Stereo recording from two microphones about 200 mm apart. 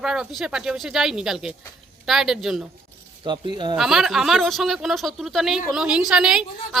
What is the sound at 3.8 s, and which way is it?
Speech, centre (ahead or behind).